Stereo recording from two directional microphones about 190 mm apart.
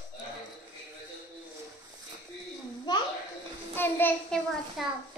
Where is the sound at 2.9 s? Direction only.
20° left (ahead or behind).